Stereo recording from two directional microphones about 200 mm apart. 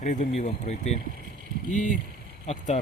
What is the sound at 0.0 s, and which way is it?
Speech, 35° left (ahead or behind).